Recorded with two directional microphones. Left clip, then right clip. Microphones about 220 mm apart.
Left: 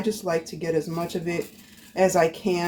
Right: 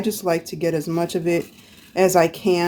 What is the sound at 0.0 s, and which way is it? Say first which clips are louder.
Speech: right 4 dB; 55° right (ahead or behind).